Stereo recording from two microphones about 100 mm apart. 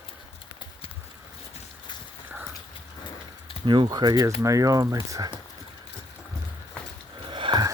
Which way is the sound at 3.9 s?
40° right (ahead or behind).